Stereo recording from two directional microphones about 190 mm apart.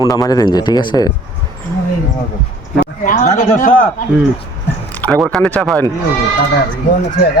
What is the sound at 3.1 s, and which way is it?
Speech, 45° left (ahead or behind).